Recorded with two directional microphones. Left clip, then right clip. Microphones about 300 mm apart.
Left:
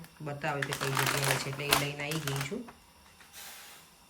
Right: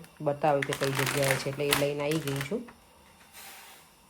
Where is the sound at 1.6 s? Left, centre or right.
Centre.